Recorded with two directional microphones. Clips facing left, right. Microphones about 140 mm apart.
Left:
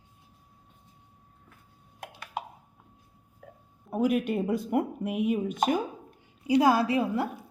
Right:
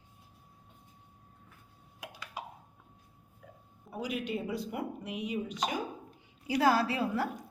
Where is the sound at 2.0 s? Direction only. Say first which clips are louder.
Left 7 dB; 55° left (ahead or behind).